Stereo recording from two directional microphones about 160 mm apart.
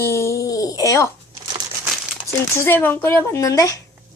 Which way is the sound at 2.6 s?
15° left (ahead or behind).